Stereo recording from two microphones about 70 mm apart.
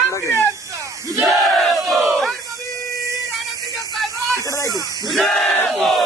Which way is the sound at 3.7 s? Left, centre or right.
Centre.